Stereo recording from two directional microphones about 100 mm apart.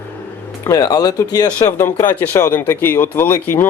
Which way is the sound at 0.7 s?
40° left (ahead or behind).